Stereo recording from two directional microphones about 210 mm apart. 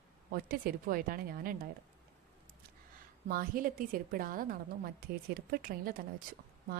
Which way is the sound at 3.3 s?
45° right (ahead or behind).